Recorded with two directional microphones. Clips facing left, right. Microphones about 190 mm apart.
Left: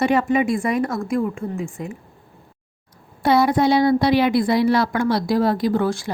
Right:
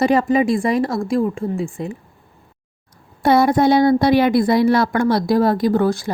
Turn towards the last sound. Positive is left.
turn(degrees=-40)  # may be behind; listen again after turning